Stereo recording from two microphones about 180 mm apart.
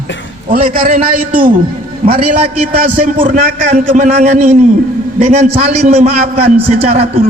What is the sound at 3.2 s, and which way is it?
A man's voice, 40° right (ahead or behind).